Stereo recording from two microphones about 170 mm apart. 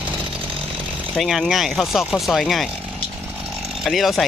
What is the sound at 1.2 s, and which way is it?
Speech, centre (ahead or behind).